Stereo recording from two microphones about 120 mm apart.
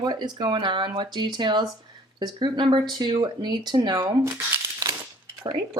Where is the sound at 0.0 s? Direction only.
35° right (ahead or behind).